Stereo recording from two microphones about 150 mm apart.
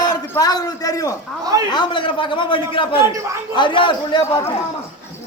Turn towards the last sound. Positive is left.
turn(degrees=30)  # may be behind; listen again after turning